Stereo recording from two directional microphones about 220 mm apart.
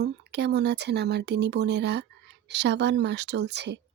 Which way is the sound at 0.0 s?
50° right (ahead or behind).